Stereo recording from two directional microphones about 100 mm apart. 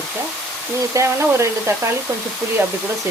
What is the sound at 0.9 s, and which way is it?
Speech, 30° right (ahead or behind).